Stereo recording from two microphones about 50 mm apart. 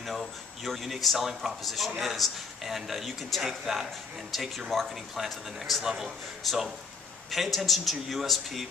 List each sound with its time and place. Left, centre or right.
0.0 s a man's voice: centre